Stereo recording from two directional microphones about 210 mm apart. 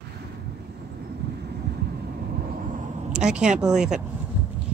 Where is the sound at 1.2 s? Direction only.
50° right (ahead or behind).